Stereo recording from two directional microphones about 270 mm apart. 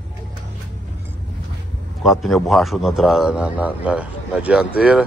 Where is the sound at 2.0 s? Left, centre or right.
Centre.